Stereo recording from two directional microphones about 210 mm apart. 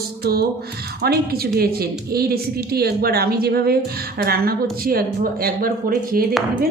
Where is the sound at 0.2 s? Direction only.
50° right (ahead or behind).